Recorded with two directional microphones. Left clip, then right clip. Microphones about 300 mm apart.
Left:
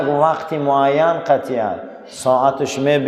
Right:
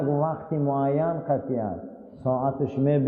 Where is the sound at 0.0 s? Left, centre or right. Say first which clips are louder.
Left 10 dB; centre.